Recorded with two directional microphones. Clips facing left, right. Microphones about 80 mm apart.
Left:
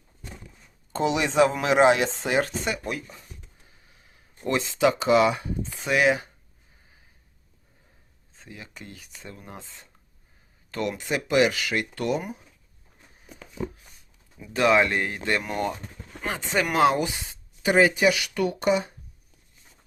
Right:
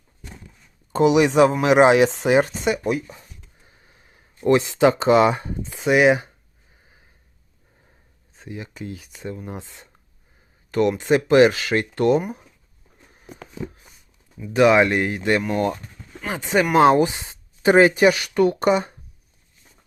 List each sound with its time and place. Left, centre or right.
0.9 s speech: centre
3.8 s a sound: right
4.4 s speech: right
5.7 s speech: centre
8.4 s speech: right
8.7 s speech: centre
9.2 s speech: centre
10.7 s speech: right
11.1 s speech: right
13.8 s a sound: centre
14.5 s speech: centre
15.4 s speech: centre
16.7 s speech: right